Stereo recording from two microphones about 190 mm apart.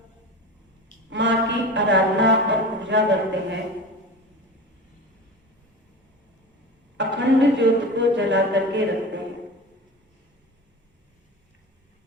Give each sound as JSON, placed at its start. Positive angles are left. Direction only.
{"t": 1.1, "sound": "speech", "side_deg": -70}
{"t": 6.9, "sound": "speech", "side_deg": -65}